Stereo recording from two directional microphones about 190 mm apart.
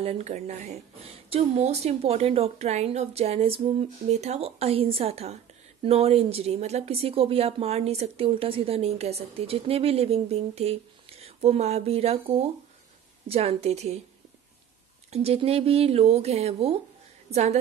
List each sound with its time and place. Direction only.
0.0 s speech: 35° right (ahead or behind)
15.0 s a woman's voice: 30° right (ahead or behind)